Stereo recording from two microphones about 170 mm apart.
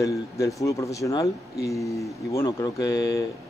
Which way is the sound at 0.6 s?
20° left (ahead or behind).